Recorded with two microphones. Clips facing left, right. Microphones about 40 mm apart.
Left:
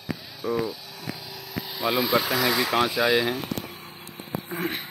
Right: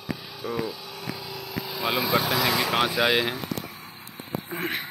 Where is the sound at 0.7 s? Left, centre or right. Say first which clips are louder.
Right 3 dB; right.